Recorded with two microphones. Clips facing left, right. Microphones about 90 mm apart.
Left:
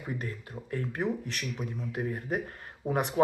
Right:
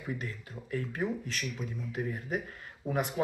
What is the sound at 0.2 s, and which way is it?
Speech, 40° left (ahead or behind).